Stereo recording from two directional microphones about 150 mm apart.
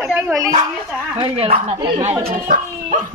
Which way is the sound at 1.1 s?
40° right (ahead or behind).